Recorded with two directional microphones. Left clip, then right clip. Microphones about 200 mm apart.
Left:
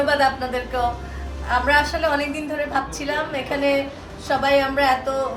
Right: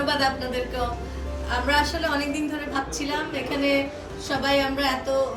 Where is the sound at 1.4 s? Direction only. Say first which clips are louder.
Left 5 dB; 35° left (ahead or behind).